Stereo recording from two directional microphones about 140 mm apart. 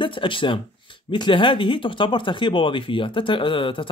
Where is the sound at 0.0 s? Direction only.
35° left (ahead or behind).